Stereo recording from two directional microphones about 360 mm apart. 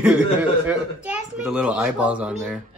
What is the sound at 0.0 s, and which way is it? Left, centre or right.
Speech, centre.